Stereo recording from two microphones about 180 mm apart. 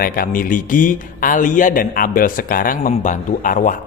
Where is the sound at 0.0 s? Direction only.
50° left (ahead or behind).